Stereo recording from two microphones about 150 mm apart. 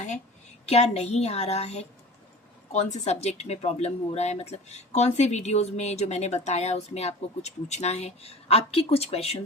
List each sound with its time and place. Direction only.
0.6 s speech: 45° left (ahead or behind)